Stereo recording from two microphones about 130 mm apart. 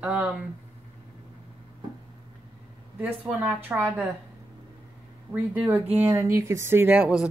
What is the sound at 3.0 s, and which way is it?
Speech, 15° right (ahead or behind).